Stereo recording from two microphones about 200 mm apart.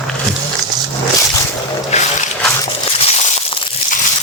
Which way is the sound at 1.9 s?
35° left (ahead or behind).